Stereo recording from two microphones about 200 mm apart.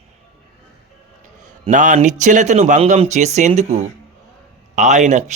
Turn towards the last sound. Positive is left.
turn(degrees=-35)  # may be behind; listen again after turning